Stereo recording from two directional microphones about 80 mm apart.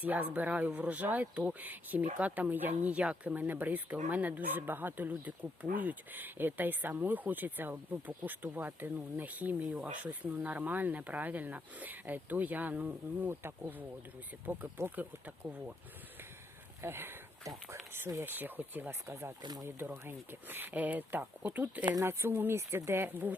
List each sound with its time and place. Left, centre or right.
0.0 s speech: right
9.6 s speech: centre
10.0 s speech: centre
15.4 s speech: centre
16.8 s speech: right
17.4 s speech: right
17.9 s speech: right
19.4 s speech: right
19.6 s speech: right
22.0 s speech: right